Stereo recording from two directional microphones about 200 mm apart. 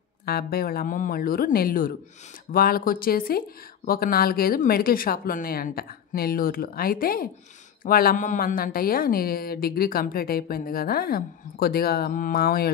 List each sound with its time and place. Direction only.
0.2 s speech: 50° left (ahead or behind)